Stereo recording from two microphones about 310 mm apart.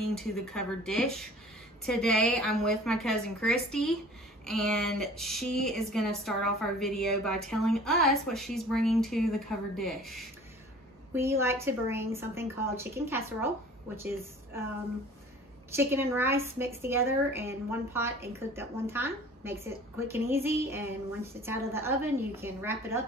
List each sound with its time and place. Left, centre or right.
0.1 s a woman's voice: centre
15.7 s a woman's voice: centre